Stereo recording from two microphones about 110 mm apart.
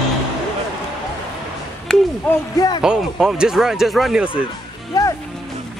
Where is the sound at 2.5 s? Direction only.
35° left (ahead or behind).